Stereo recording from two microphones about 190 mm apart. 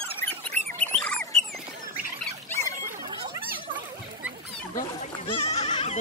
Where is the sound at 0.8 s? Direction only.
5° left (ahead or behind).